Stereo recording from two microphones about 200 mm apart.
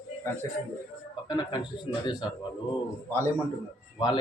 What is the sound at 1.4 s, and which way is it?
Speech, 25° left (ahead or behind).